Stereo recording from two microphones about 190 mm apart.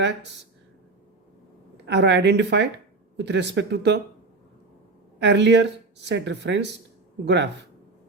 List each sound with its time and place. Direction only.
1.9 s speech: 65° right (ahead or behind)
5.2 s speech: 65° right (ahead or behind)